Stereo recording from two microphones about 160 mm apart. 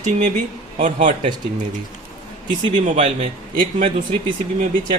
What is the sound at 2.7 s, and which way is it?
Speech, 50° right (ahead or behind).